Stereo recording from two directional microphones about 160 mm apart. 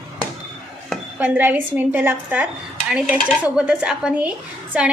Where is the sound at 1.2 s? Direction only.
10° right (ahead or behind).